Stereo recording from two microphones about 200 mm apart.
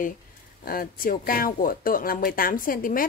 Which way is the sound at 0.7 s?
45° left (ahead or behind).